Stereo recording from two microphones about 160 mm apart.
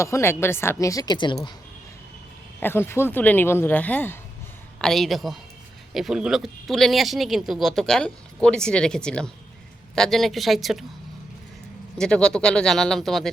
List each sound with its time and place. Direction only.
0.0 s a woman's voice: 15° left (ahead or behind)
2.6 s speech: 15° left (ahead or behind)
11.9 s speech: 5° left (ahead or behind)